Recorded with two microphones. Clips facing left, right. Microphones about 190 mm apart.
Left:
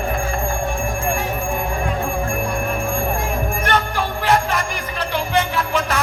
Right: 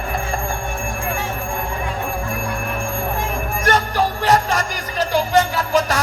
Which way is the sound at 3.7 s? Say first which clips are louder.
Right 5 dB; 40° right (ahead or behind).